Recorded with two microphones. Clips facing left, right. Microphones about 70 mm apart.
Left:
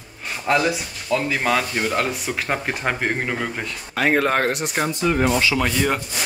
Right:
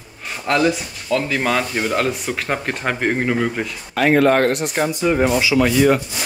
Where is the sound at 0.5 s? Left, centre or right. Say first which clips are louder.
Right 2 dB; centre.